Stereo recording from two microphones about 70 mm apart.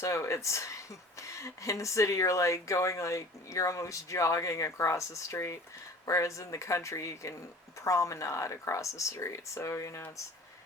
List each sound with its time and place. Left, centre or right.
0.0 s speech: left